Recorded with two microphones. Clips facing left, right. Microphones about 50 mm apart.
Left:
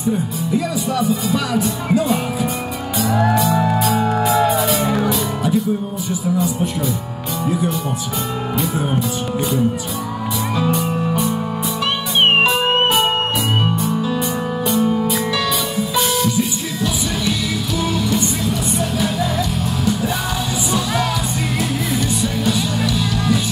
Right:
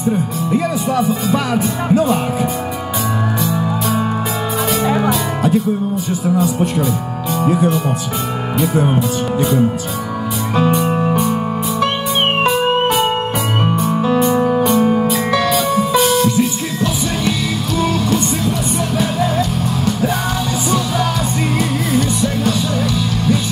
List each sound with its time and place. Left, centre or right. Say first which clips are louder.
0.5 s speech: right 3 dB; right
4.8 s music: right 3 dB; right
7.4 s speech: right 5 dB; right
8.7 s speech: right 7 dB; right
10.5 s music: right 6 dB; right
13.8 s music: right 5 dB; right
14.3 s music: right 6 dB; right
16.3 s music: right 4 dB; right
21.9 s music: right 4 dB; right